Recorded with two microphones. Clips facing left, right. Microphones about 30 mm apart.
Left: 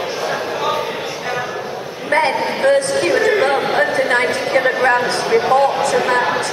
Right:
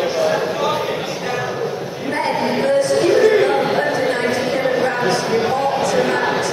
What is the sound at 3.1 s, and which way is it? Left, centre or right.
Music, centre.